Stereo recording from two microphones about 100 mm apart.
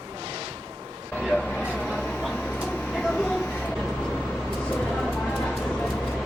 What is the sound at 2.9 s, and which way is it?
Vehicle, 5° left (ahead or behind).